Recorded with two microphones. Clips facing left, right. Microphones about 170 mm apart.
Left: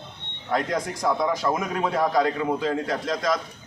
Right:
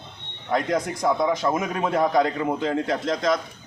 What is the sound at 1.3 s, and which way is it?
A man's voice, 20° right (ahead or behind).